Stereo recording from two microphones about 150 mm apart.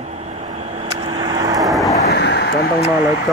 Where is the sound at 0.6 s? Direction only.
45° right (ahead or behind); by 1.6 s 25° right (ahead or behind).